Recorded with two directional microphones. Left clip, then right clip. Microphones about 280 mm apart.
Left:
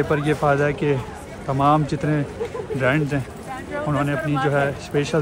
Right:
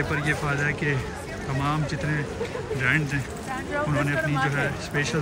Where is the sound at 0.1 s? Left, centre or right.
Centre.